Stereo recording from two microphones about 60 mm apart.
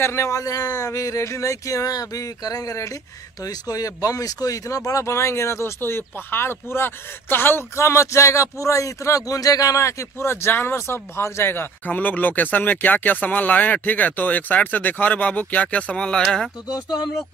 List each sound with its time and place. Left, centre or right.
0.0 s speech: left
3.4 s speech: left
5.0 s speech: left
10.1 s speech: left
11.9 s speech: left; by 16.4 s centre